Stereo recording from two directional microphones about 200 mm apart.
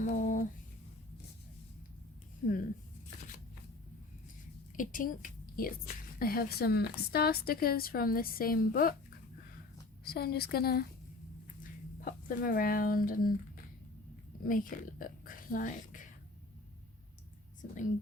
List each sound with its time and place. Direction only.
0.0 s a sound: 40° left (ahead or behind)
4.8 s a woman's voice: 40° left (ahead or behind)
10.0 s a woman's voice: 50° left (ahead or behind)
11.9 s speech: 45° left (ahead or behind)
14.4 s speech: 40° left (ahead or behind)